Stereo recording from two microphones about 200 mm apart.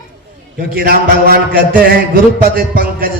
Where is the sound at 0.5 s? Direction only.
50° right (ahead or behind).